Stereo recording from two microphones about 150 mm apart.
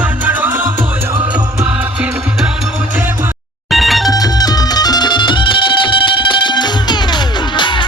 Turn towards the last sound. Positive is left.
turn(degrees=30)  # may be behind; listen again after turning